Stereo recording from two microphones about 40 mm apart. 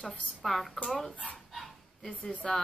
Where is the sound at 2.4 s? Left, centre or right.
Centre.